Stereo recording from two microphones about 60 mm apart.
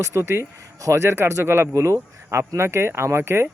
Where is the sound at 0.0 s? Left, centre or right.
Right.